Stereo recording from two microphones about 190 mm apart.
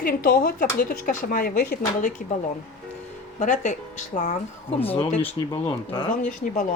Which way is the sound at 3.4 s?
40° left (ahead or behind).